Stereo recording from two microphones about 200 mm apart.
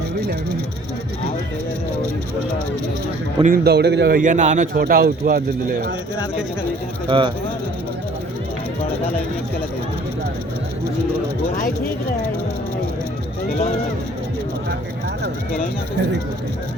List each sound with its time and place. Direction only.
3.4 s a man's voice: 50° right (ahead or behind)
4.2 s speech: 40° right (ahead or behind)
7.1 s speech: 25° right (ahead or behind)